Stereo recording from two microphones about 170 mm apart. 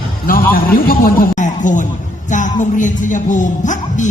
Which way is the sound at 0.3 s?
60° left (ahead or behind).